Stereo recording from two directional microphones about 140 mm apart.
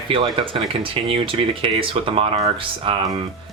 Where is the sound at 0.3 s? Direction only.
40° right (ahead or behind).